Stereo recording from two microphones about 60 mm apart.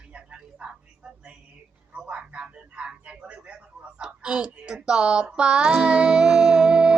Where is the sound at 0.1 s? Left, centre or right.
Centre.